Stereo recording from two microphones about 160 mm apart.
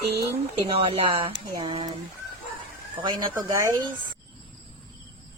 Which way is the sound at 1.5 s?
25° right (ahead or behind).